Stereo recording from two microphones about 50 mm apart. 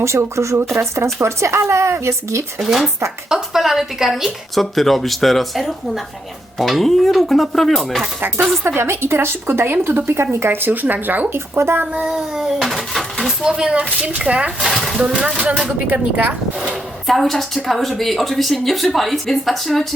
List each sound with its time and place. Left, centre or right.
0.0 s speech: right
2.6 s a woman's voice: centre
8.6 s speech: right
11.3 s speech: right
11.9 s a sound: centre
13.4 s speech: centre
14.8 s a sound: centre
15.0 s speech: centre
15.9 s speech: right
17.1 s a woman's voice: centre